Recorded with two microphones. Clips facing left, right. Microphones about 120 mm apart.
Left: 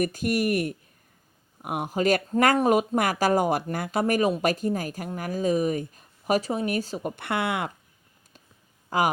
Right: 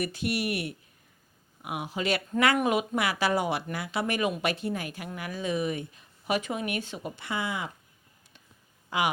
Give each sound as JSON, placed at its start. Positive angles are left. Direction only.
{"t": 0.0, "sound": "speech", "side_deg": 45}
{"t": 7.2, "sound": "speech", "side_deg": 65}
{"t": 8.9, "sound": "speech", "side_deg": 40}